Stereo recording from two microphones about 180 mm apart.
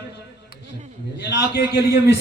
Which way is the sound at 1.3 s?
65° left (ahead or behind).